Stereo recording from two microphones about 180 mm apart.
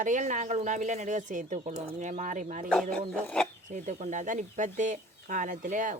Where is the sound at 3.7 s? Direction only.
40° right (ahead or behind).